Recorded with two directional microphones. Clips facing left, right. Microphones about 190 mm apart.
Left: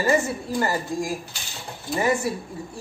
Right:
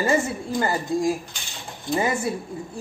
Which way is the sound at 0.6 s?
25° right (ahead or behind).